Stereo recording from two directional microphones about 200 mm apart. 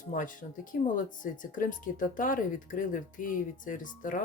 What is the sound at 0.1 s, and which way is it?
Speech, 40° left (ahead or behind).